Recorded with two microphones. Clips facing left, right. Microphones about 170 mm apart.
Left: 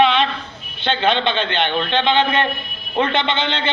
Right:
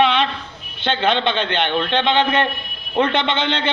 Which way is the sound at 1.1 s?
55° right (ahead or behind).